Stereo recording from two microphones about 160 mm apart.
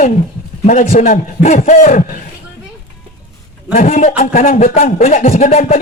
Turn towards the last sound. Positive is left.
turn(degrees=45)  # may be behind; listen again after turning